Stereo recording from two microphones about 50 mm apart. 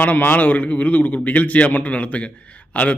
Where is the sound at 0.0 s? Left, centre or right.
Left.